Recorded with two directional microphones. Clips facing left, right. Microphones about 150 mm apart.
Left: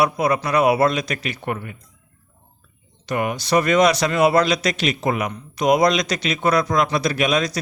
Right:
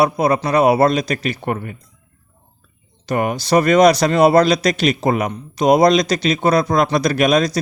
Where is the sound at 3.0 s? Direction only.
40° right (ahead or behind).